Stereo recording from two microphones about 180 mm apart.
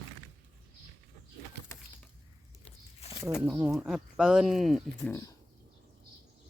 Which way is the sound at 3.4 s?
10° right (ahead or behind).